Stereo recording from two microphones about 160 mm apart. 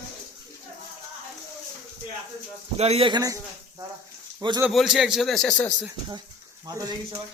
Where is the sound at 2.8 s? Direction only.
40° right (ahead or behind).